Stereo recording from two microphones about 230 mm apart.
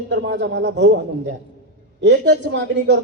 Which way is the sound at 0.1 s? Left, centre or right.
Right.